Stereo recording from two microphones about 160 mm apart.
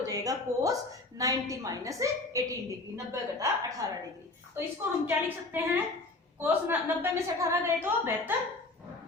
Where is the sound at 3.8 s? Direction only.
25° right (ahead or behind).